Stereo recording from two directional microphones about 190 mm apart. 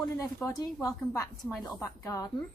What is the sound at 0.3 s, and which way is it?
A woman's voice, 15° left (ahead or behind).